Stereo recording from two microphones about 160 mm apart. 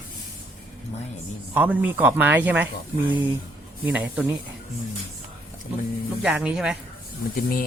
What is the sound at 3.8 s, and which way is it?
Speech, 10° right (ahead or behind).